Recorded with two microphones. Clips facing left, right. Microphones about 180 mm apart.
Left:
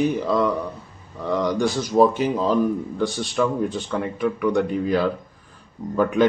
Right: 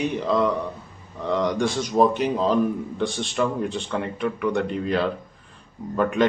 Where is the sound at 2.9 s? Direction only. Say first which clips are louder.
Left 1 dB; centre (ahead or behind).